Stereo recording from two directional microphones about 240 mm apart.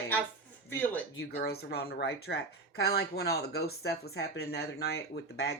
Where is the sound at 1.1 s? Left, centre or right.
Left.